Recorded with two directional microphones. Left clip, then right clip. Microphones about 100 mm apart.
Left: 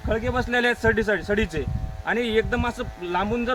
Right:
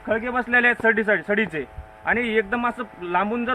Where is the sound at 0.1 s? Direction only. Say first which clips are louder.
Right 3 dB; 20° left (ahead or behind).